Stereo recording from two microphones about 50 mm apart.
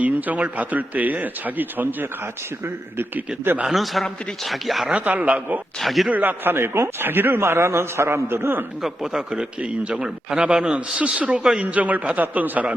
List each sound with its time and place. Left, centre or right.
0.0 s a man's voice: right
3.7 s speech: centre
5.0 s a man's voice: right
5.8 s speech: centre
6.1 s a man's voice: right
9.1 s a man's voice: centre
11.6 s a man's voice: right